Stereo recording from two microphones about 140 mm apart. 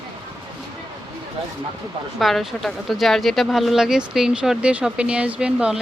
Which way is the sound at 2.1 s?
Centre (ahead or behind).